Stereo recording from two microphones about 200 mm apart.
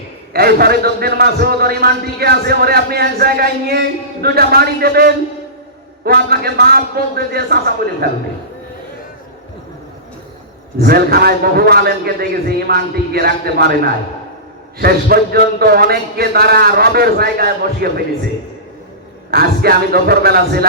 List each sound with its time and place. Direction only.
0.3 s a man's voice: 50° right (ahead or behind)
10.8 s a man's voice: 50° right (ahead or behind)
19.3 s a man's voice: 50° right (ahead or behind)